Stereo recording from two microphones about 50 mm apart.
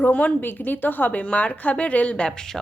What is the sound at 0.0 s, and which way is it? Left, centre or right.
A woman's voice, left.